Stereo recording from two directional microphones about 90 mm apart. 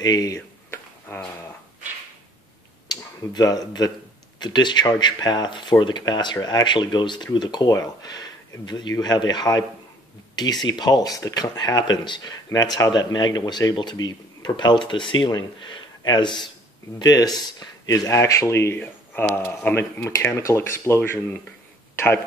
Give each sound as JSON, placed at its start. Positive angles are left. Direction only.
{"t": 0.0, "sound": "speech", "side_deg": 45}
{"t": 0.7, "sound": "a sound", "side_deg": 25}
{"t": 2.9, "sound": "speech", "side_deg": 45}
{"t": 17.0, "sound": "speech", "side_deg": 45}
{"t": 18.8, "sound": "speech", "side_deg": 20}
{"t": 21.9, "sound": "a sound", "side_deg": 20}